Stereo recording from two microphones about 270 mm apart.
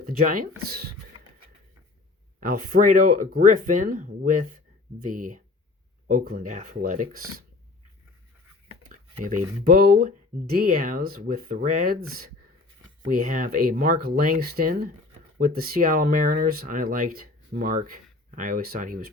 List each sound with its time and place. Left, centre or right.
0.0 s speech: right
2.4 s speech: right
9.6 s speech: right
13.1 s speech: right